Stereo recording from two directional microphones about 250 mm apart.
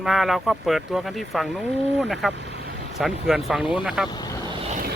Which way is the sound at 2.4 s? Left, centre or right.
Right.